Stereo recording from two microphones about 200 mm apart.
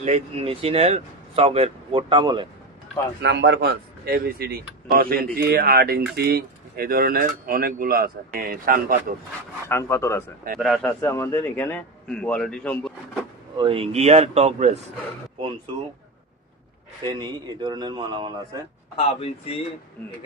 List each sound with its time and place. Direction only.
0.0 s speech: 30° right (ahead or behind)
3.2 s speech: 60° right (ahead or behind)
9.6 s a man's voice: 15° left (ahead or behind)
10.6 s a man's voice: centre (ahead or behind)
11.0 s a man's voice: 10° left (ahead or behind)
13.6 s speech: 30° right (ahead or behind)
17.0 s speech: 20° right (ahead or behind)
18.9 s speech: 30° left (ahead or behind)